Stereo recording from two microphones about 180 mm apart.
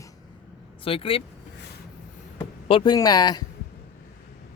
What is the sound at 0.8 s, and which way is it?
Speech, 30° left (ahead or behind).